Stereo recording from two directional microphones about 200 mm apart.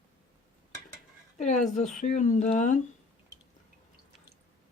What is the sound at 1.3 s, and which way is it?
Speech, 35° left (ahead or behind).